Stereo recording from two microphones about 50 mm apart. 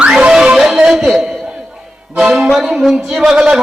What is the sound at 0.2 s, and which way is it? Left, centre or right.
Music, centre.